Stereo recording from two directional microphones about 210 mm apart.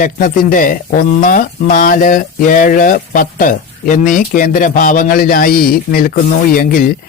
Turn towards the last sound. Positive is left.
turn(degrees=40)  # may be behind; listen again after turning